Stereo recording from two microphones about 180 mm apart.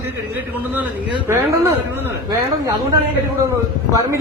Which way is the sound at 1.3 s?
15° right (ahead or behind).